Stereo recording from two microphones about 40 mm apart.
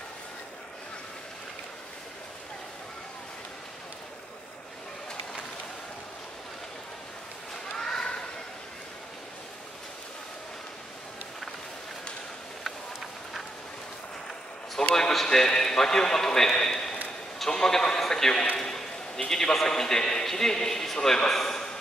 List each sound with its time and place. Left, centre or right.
7.7 s children playing: centre
12.6 s a sound: centre
15.0 s a man's voice: centre